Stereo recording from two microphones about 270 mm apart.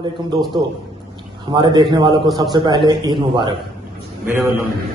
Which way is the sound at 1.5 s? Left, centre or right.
Centre.